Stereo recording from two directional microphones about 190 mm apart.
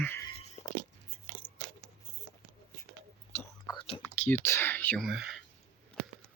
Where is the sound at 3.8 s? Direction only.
30° left (ahead or behind).